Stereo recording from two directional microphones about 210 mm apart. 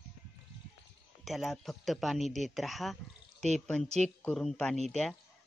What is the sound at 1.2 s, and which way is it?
Speech, centre (ahead or behind).